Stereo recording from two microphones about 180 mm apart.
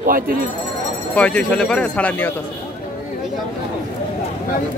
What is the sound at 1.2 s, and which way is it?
Speech, 5° left (ahead or behind).